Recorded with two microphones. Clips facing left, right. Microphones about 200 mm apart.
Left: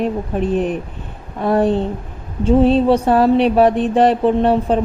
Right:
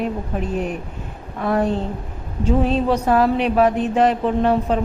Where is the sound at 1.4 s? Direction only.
30° left (ahead or behind).